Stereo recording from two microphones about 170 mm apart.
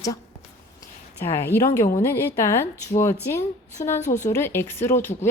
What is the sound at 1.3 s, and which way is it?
Speech, 15° left (ahead or behind).